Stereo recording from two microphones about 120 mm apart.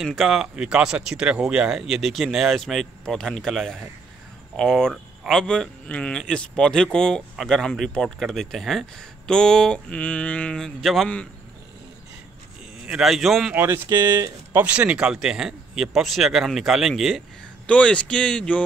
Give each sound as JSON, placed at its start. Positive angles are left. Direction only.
{"t": 0.0, "sound": "speech", "side_deg": 0}
{"t": 9.3, "sound": "mantra", "side_deg": 5}
{"t": 12.8, "sound": "speech", "side_deg": -5}
{"t": 13.6, "sound": "speech", "side_deg": -20}
{"t": 17.6, "sound": "mantra", "side_deg": 10}